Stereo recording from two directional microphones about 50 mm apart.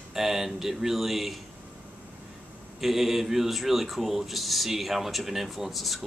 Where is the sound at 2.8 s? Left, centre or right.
Centre.